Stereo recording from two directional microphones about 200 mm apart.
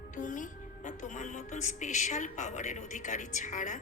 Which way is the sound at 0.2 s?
40° left (ahead or behind).